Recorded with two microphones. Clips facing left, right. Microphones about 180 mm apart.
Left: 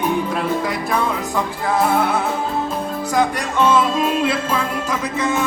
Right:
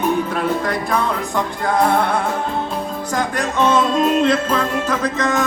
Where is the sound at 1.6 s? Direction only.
5° left (ahead or behind).